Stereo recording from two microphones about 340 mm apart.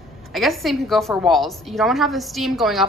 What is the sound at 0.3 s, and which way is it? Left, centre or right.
A woman's voice, centre.